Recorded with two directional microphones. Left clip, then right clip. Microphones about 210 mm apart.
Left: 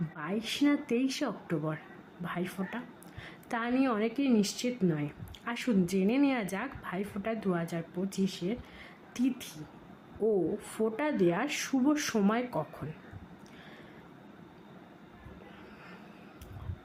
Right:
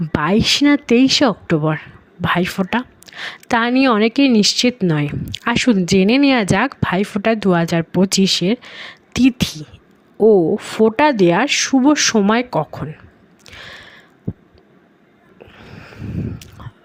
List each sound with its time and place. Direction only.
0.2 s a woman's voice: 45° right (ahead or behind)